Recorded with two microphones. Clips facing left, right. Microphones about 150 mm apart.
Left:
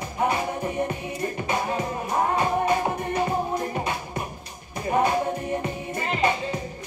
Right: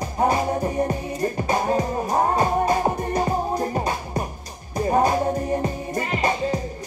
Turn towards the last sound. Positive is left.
turn(degrees=-35)  # may be behind; listen again after turning